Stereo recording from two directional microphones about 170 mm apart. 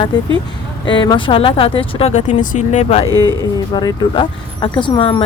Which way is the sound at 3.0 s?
20° right (ahead or behind).